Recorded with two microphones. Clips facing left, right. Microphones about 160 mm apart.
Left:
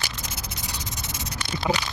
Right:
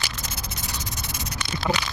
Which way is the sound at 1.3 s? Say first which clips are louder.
Left 1 dB; 20° left (ahead or behind).